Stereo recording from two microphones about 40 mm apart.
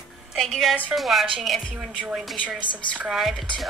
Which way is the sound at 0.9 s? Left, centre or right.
Centre.